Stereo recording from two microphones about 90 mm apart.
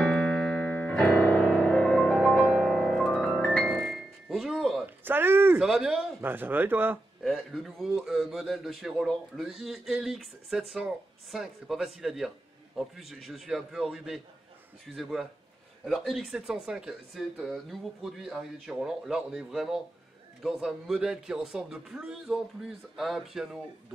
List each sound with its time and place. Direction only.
0.0 s piano: 10° left (ahead or behind)
2.2 s music: 5° left (ahead or behind)
3.7 s music: 5° right (ahead or behind)
4.8 s a sound: 20° right (ahead or behind)
5.6 s speech: 5° right (ahead or behind)
6.2 s speech: 20° right (ahead or behind)
7.2 s speech: centre (ahead or behind)